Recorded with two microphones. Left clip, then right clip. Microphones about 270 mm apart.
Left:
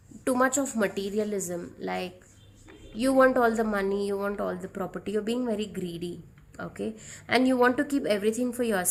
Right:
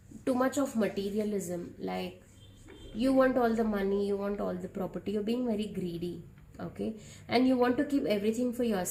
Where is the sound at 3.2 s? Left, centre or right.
Left.